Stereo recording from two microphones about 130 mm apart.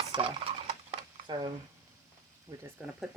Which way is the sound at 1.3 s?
35° right (ahead or behind).